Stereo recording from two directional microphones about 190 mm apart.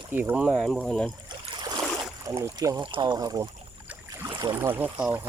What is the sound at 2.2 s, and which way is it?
Speech, 15° right (ahead or behind).